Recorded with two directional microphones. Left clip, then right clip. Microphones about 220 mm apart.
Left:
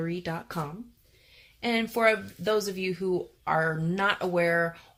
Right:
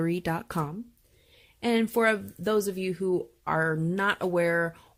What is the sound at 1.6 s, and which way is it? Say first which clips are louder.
Speech: even; 45° right (ahead or behind).